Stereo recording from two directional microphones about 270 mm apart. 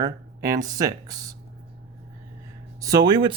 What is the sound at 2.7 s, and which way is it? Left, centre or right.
Speech, centre.